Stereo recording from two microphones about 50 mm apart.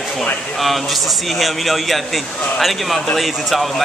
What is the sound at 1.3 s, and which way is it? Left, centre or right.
Speech, centre.